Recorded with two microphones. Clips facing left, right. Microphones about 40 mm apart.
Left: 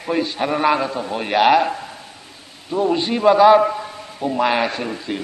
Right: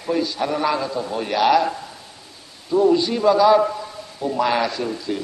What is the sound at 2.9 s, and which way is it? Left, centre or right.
A man's voice, left.